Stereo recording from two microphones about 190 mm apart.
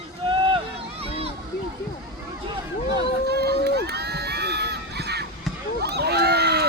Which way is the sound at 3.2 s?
60° right (ahead or behind).